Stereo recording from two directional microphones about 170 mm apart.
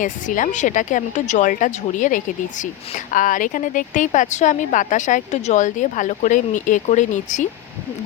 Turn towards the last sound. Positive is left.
turn(degrees=45)  # may be behind; listen again after turning